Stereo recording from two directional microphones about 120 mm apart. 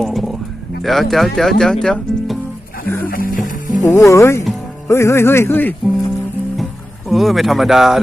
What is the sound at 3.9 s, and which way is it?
Speech, 25° left (ahead or behind).